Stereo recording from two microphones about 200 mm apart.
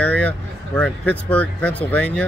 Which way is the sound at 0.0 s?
5° left (ahead or behind).